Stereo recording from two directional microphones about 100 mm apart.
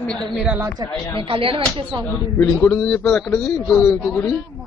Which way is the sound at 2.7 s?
5° left (ahead or behind).